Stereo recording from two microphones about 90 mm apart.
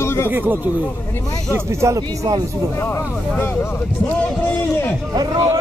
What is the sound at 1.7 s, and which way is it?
Speech, 35° right (ahead or behind).